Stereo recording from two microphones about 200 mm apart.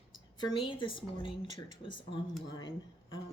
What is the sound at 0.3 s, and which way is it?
Speech, 25° left (ahead or behind).